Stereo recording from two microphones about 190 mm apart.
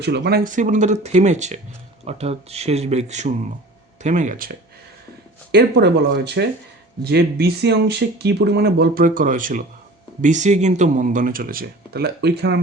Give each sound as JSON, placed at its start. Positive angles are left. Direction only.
{"t": 0.0, "sound": "speech", "side_deg": -60}
{"t": 5.5, "sound": "speech", "side_deg": -60}